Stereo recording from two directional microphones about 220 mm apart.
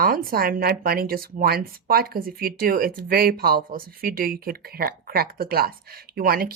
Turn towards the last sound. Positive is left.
turn(degrees=-45)  # may be behind; listen again after turning